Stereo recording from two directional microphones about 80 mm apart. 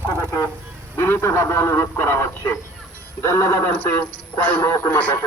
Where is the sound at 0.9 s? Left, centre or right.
Left.